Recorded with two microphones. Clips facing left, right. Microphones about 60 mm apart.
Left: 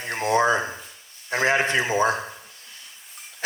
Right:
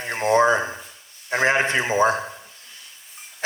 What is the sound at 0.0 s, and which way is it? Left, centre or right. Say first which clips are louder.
A man's voice: right 3 dB; right.